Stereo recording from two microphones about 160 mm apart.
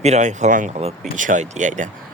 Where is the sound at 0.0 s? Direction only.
45° right (ahead or behind).